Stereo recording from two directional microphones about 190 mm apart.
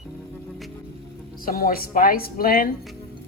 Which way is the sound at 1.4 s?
50° left (ahead or behind).